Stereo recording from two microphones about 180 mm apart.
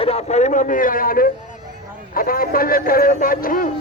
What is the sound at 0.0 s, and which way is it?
A man's voice, 35° left (ahead or behind).